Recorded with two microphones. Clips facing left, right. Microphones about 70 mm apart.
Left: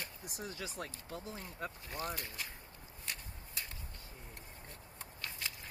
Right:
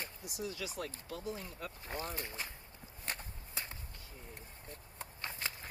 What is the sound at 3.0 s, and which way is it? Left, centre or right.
Walk, right.